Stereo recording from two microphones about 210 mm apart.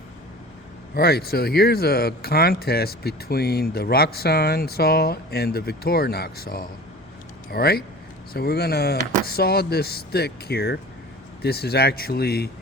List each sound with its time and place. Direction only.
0.9 s speech: 45° left (ahead or behind)